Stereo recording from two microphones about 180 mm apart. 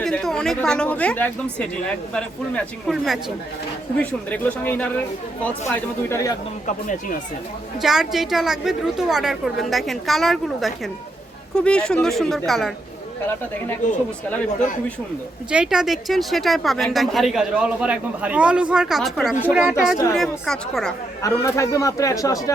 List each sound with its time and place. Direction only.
0.0 s a woman's voice: centre (ahead or behind)
6.7 s speech: 45° left (ahead or behind)
7.8 s a woman's voice: centre (ahead or behind)
15.4 s a woman's voice: 5° right (ahead or behind)
21.2 s a man's voice: 15° left (ahead or behind)